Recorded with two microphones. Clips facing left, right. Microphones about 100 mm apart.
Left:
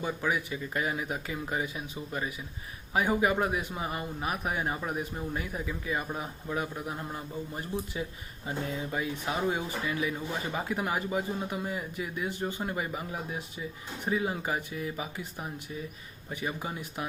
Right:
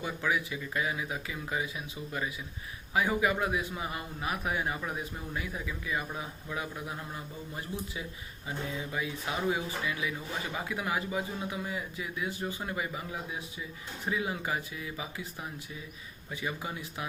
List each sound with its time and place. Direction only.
0.5 s speech: 40° left (ahead or behind)
5.4 s speech: 35° left (ahead or behind)
8.4 s speech: 40° left (ahead or behind)
12.4 s speech: 25° left (ahead or behind)
14.1 s speech: 30° left (ahead or behind)
16.5 s speech: 35° left (ahead or behind)